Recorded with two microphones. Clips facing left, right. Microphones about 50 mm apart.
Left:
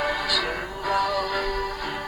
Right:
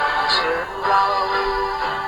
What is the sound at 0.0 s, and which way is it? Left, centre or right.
Music, right.